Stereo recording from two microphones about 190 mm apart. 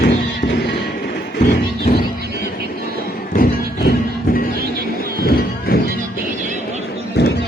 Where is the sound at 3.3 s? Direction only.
50° left (ahead or behind).